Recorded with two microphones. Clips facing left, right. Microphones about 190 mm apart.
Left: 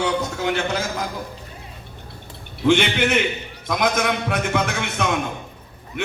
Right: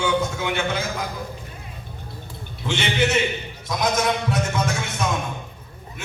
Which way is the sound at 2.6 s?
55° left (ahead or behind).